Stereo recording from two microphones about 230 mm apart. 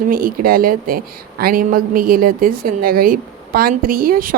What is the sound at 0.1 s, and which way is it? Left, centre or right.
Speech, right.